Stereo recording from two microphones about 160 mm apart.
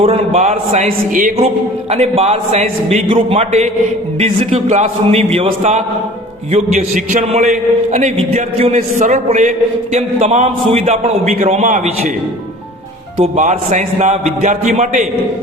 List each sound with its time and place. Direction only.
0.0 s a man's voice: 40° right (ahead or behind)
0.4 s a man's voice: 50° right (ahead or behind)
1.1 s a sound: 55° right (ahead or behind)
1.9 s a man's voice: 40° right (ahead or behind)
6.5 s a man's voice: 50° right (ahead or behind)
13.1 s a man's voice: 50° right (ahead or behind)